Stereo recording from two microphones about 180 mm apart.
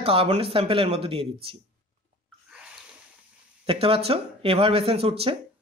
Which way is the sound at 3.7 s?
30° right (ahead or behind).